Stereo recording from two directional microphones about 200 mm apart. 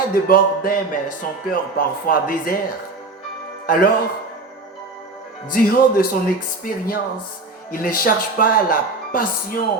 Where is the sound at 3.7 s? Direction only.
45° left (ahead or behind).